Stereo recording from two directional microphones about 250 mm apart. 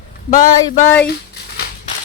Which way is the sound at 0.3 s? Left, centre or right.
Left.